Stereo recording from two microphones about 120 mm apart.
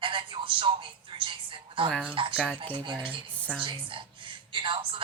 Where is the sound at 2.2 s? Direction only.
45° right (ahead or behind).